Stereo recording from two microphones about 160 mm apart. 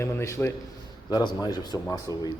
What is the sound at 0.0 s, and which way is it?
A man's voice, 15° left (ahead or behind).